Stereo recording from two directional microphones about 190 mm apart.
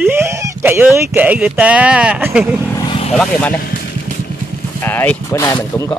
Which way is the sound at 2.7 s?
20° left (ahead or behind).